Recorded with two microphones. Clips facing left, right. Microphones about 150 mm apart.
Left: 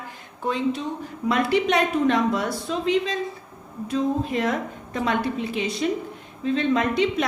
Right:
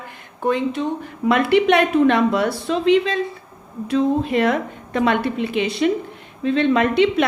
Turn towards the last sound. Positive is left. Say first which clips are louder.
# right 5 dB
turn(degrees=-70)  # may be behind; listen again after turning